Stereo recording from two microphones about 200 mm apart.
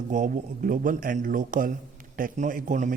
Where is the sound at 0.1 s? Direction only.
40° right (ahead or behind).